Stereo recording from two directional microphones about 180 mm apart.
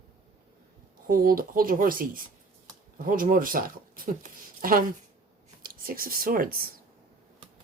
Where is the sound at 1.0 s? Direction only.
55° right (ahead or behind).